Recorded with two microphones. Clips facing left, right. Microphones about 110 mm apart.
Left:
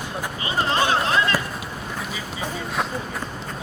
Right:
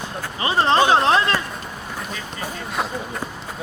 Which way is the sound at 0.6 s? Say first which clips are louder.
Right 6 dB; 30° right (ahead or behind).